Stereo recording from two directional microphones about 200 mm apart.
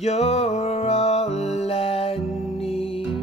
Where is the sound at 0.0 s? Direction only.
30° left (ahead or behind).